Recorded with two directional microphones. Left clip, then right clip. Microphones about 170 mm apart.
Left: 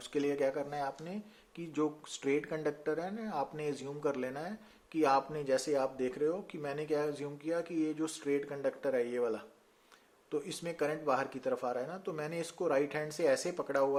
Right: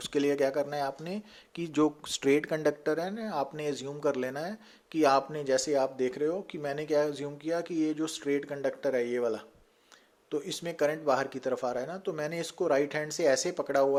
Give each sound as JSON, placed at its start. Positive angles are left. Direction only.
{"t": 0.0, "sound": "speech", "side_deg": -40}